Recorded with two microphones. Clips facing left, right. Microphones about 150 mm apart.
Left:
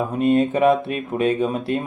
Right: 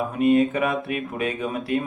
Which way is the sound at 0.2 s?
30° left (ahead or behind).